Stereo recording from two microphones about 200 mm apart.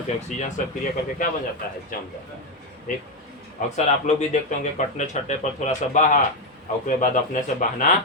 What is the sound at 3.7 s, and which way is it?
Speech, 35° left (ahead or behind).